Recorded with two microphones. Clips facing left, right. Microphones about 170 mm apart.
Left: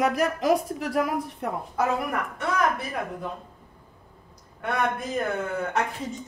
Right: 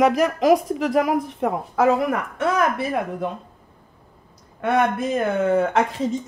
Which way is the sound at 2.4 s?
80° right.